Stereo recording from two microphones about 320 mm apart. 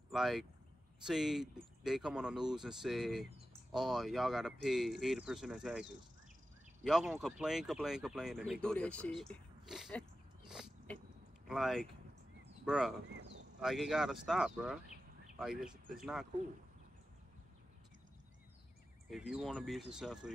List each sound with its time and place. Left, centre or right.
0.1 s speech: centre
10.5 s a sound: centre
11.4 s speech: centre
13.1 s a sound: right
13.6 s speech: centre
19.0 s speech: centre